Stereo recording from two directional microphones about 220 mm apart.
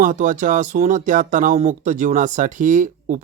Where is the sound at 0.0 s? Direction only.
35° right (ahead or behind).